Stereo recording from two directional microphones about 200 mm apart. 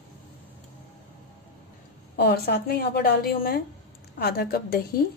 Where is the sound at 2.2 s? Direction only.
55° left (ahead or behind).